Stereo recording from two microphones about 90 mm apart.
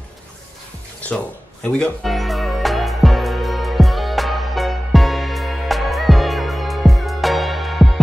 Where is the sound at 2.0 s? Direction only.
Centre (ahead or behind).